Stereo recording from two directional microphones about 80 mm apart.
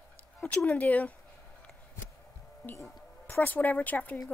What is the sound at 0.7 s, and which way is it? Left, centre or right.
Speech, centre.